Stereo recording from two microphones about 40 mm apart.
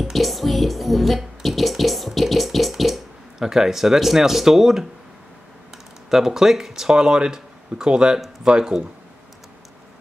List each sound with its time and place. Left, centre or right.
0.0 s music: centre
6.0 s speech: centre